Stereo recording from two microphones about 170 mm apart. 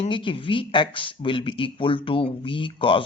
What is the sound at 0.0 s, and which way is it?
Speech, 30° left (ahead or behind).